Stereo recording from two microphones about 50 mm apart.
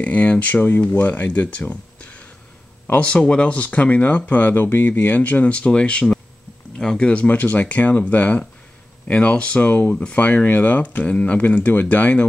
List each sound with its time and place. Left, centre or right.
0.0 s speech: left; by 7.1 s centre
7.1 s speech: left